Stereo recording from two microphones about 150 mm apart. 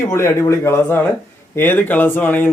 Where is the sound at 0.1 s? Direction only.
15° left (ahead or behind).